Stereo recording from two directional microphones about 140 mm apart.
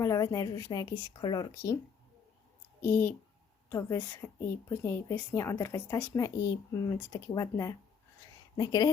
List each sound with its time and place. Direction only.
0.0 s speech: 20° left (ahead or behind)
2.8 s a woman's voice: 15° left (ahead or behind); by 8.9 s 30° left (ahead or behind)